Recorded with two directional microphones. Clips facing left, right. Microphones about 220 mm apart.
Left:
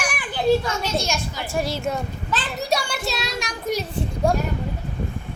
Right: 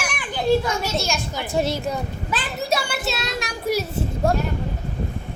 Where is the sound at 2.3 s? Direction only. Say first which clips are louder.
Even; 5° right (ahead or behind).